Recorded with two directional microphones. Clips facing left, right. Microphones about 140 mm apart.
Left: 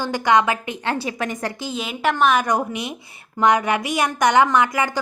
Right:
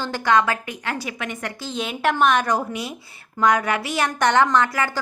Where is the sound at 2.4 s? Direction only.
20° left (ahead or behind).